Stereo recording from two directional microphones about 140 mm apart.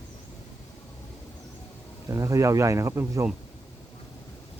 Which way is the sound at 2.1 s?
20° right (ahead or behind).